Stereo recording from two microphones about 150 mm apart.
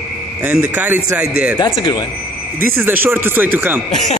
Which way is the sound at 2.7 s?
15° right (ahead or behind).